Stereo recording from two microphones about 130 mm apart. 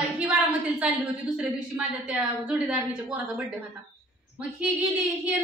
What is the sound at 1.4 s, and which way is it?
A woman's voice, 10° right (ahead or behind).